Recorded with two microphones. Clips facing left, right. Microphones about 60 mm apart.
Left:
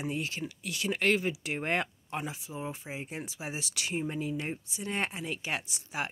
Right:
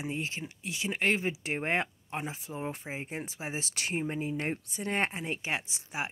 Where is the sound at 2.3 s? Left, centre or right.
Right.